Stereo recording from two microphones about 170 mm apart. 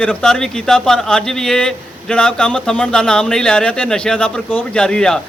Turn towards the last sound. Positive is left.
turn(degrees=5)  # may be behind; listen again after turning